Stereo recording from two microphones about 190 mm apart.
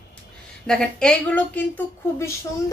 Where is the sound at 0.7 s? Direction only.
5° left (ahead or behind).